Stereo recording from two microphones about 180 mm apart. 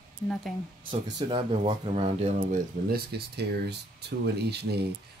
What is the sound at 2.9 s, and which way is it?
Speech, 65° right (ahead or behind).